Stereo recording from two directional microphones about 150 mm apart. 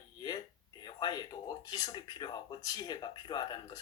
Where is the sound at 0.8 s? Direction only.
30° left (ahead or behind).